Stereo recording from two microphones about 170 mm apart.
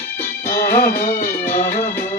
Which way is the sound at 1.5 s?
45° left (ahead or behind).